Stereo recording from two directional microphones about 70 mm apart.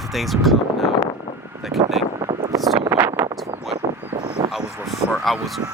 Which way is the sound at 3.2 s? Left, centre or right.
Right.